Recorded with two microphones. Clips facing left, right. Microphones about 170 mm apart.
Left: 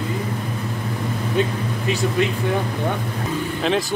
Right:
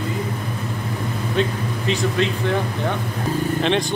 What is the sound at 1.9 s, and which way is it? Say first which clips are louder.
Speech: even; 10° left (ahead or behind).